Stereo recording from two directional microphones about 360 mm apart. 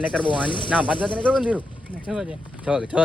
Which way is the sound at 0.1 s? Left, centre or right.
Centre.